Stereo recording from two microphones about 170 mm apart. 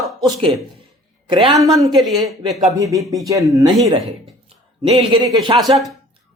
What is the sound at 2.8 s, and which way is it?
Speech, 20° right (ahead or behind).